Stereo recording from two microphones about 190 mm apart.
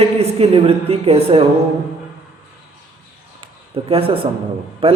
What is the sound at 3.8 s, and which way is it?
A man's voice, 30° right (ahead or behind).